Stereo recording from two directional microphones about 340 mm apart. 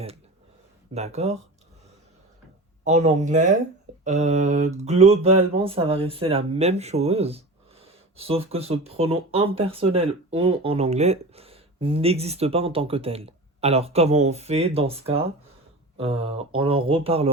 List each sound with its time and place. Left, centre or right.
0.9 s speech: centre
2.8 s speech: centre